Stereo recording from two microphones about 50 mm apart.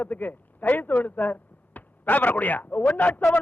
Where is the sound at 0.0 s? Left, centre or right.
Left.